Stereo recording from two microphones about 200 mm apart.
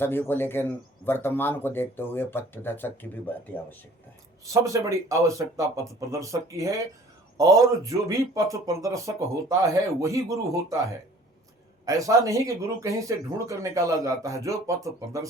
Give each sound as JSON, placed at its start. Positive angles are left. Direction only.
{"t": 0.0, "sound": "speech", "side_deg": 10}
{"t": 4.5, "sound": "speech", "side_deg": -15}
{"t": 11.9, "sound": "speech", "side_deg": -15}